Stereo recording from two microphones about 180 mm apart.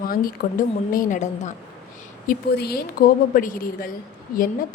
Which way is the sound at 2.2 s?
55° left (ahead or behind).